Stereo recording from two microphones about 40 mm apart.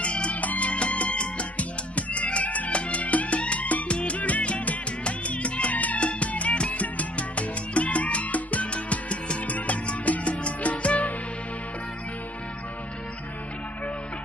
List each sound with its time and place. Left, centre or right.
0.0 s music: left
0.4 s music: left